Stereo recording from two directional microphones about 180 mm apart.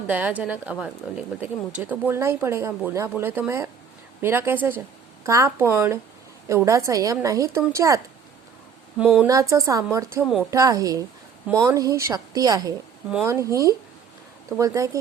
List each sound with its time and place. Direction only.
0.1 s speech: 10° right (ahead or behind)
9.0 s speech: 5° right (ahead or behind)
9.2 s a woman's voice: 15° right (ahead or behind)